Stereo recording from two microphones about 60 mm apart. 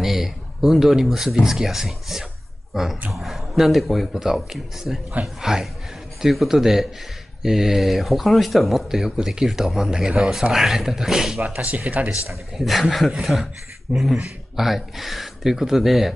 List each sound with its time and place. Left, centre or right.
0.0 s speech: centre
11.4 s speech: right
12.5 s speech: centre